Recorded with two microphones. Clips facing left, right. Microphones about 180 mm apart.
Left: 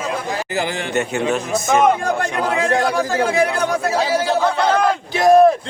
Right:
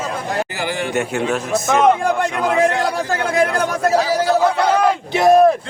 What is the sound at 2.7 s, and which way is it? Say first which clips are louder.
Speech: left 2 dB; 35° left (ahead or behind).